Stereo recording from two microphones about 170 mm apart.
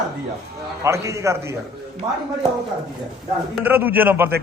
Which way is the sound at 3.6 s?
10° right (ahead or behind).